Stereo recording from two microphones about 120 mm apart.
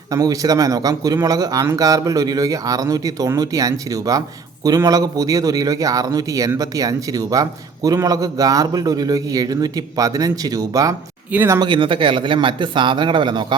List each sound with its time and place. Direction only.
0.1 s a man's voice: 30° right (ahead or behind)
11.6 s speech: 45° right (ahead or behind)